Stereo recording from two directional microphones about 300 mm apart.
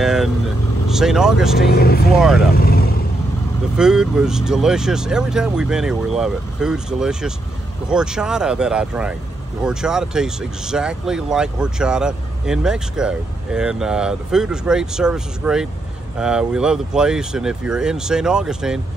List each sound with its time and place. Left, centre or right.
0.0 s vehicle: centre
0.8 s speech: centre
1.6 s speech: left
2.1 s speech: centre
2.5 s vehicle: left
3.7 s speech: centre